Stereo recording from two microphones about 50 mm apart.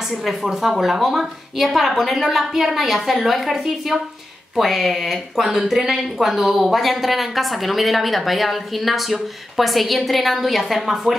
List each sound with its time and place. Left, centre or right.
0.2 s speech: centre